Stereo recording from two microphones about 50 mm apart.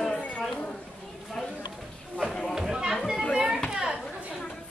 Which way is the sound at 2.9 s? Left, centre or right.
Centre.